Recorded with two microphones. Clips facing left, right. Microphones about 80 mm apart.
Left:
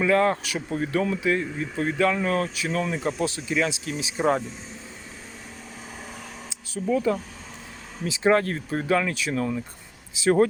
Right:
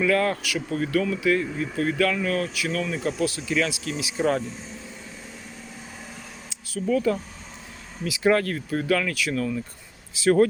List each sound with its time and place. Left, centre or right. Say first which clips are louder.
0.0 s speech: left 1 dB; left
6.8 s speech: even; left